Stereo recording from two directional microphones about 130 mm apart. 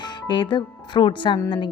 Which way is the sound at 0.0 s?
40° left (ahead or behind).